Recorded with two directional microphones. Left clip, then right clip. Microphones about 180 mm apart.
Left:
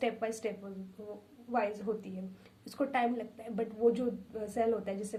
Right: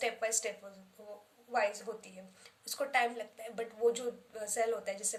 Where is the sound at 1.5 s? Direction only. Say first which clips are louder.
Even; 25° right (ahead or behind).